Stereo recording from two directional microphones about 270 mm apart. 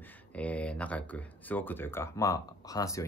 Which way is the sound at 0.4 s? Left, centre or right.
Centre.